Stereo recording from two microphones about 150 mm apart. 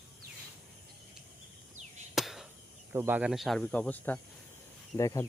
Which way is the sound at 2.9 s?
10° right (ahead or behind).